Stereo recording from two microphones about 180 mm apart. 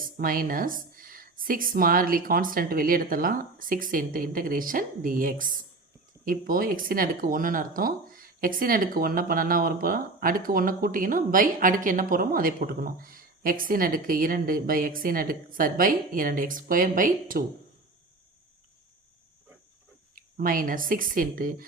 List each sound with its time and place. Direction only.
0.0 s speech: 50° right (ahead or behind)
20.1 s speech: 50° right (ahead or behind)